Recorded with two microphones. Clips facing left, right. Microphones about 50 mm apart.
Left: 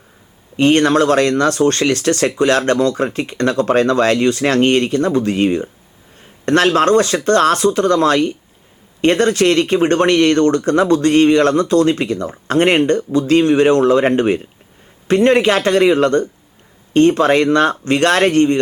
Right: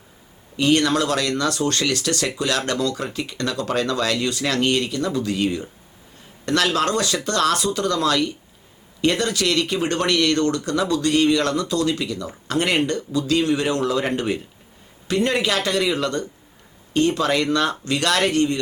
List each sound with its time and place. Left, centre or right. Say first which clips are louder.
0.5 s speech: left 6 dB; left